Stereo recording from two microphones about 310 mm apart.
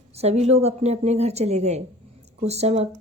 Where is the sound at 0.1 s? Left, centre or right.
Centre.